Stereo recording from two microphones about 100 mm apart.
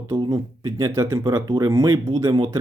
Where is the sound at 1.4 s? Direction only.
40° right (ahead or behind).